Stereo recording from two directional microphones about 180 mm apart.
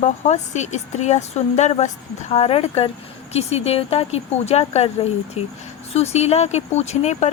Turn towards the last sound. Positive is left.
turn(degrees=40)  # may be behind; listen again after turning